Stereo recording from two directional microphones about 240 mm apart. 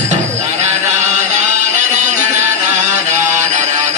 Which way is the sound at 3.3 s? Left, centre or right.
Right.